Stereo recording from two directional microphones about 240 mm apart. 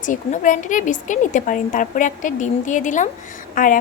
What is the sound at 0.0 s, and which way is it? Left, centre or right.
Speech, left.